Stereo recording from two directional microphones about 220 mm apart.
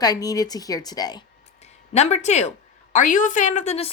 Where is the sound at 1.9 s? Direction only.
30° left (ahead or behind).